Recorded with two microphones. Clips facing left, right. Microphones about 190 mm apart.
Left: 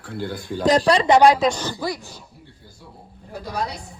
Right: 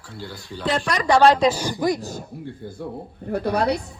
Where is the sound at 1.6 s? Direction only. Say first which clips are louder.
Right 5 dB; 15° right (ahead or behind).